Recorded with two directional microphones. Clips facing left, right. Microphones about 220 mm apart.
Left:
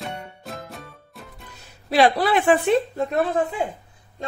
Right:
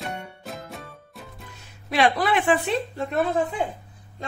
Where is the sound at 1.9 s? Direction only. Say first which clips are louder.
Left 3 dB; 35° left (ahead or behind).